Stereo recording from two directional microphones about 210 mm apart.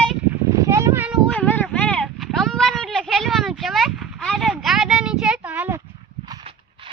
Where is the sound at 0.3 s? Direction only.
15° right (ahead or behind).